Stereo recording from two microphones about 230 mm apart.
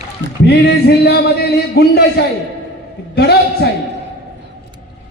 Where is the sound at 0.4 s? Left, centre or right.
Left.